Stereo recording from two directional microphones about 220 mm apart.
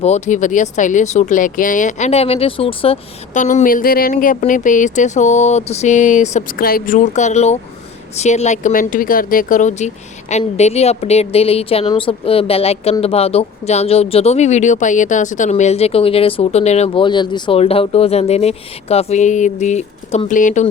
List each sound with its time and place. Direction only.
0.0 s a woman's voice: 30° left (ahead or behind)